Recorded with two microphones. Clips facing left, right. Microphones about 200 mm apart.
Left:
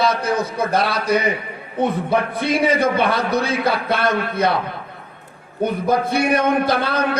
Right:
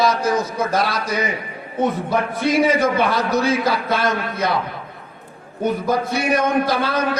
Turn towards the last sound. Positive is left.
turn(degrees=60)  # may be behind; listen again after turning